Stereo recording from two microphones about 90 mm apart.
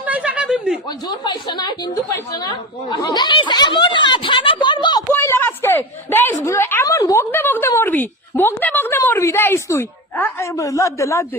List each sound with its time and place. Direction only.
0.0 s chuckle: 15° right (ahead or behind)
1.0 s a woman's voice: 55° left (ahead or behind)
2.1 s a man's voice: 40° left (ahead or behind)
2.9 s speech: 55° left (ahead or behind)
5.1 s a woman's voice: 25° left (ahead or behind)
6.8 s speech: 40° left (ahead or behind)
7.3 s a woman's voice: 20° left (ahead or behind)
10.4 s a man's voice: 35° left (ahead or behind)